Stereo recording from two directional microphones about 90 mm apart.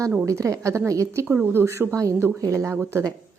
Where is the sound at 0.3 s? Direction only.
35° right (ahead or behind).